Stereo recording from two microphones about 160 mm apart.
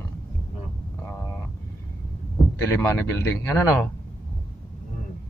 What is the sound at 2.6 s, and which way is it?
Speech, 15° left (ahead or behind).